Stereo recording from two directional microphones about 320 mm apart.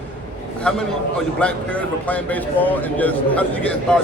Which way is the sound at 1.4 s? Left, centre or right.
Centre.